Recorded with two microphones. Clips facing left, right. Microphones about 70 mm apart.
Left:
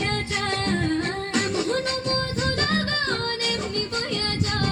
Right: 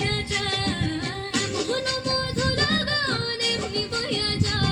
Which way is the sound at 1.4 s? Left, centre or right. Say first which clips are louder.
Left 2 dB; left.